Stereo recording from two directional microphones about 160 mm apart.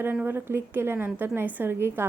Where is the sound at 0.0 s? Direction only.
10° right (ahead or behind).